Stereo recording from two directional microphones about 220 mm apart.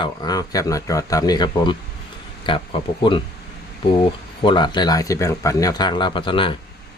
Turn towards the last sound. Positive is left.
turn(degrees=25)  # may be behind; listen again after turning